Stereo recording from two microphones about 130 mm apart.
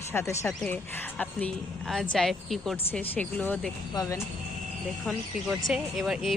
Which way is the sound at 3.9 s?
30° left (ahead or behind).